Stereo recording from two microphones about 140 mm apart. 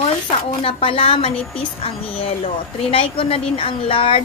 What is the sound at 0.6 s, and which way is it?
A woman's voice, 40° left (ahead or behind).